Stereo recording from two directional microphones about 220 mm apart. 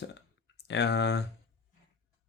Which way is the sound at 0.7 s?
50° left (ahead or behind).